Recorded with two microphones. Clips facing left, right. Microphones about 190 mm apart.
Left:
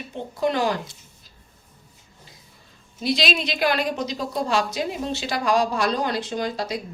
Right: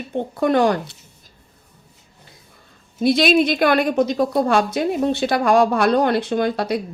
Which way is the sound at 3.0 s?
55° right (ahead or behind).